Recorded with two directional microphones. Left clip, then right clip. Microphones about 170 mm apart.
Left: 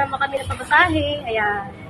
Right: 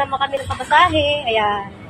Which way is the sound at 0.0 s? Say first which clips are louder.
Right 2 dB; centre (ahead or behind).